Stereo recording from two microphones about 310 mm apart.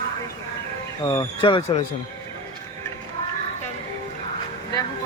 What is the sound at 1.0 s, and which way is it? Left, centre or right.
Speech, centre.